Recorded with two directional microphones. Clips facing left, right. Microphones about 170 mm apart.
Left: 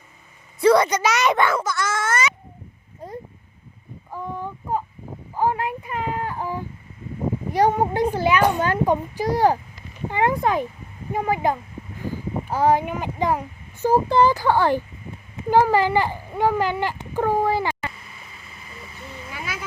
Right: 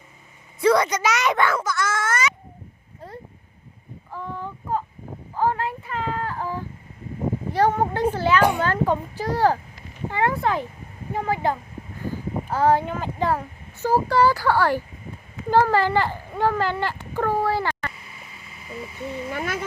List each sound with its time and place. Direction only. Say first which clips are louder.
0.6 s a sound: left 3 dB; 30° left (ahead or behind); by 8.4 s 15° left (ahead or behind)
8.5 s a child's voice: left 2 dB; 15° left (ahead or behind)
19.3 s speech: right 4 dB; 55° right (ahead or behind)